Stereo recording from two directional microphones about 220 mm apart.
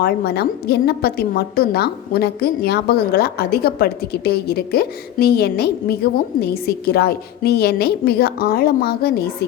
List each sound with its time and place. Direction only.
0.0 s a woman's voice: 45° left (ahead or behind)